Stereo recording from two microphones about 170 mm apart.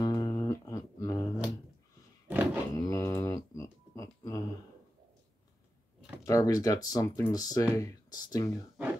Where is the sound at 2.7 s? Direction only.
20° left (ahead or behind).